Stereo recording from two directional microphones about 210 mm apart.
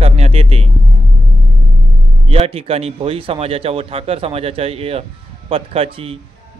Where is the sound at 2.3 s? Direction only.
25° right (ahead or behind).